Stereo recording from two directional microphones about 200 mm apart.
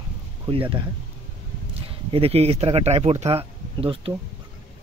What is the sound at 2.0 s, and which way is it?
Speech, 30° right (ahead or behind).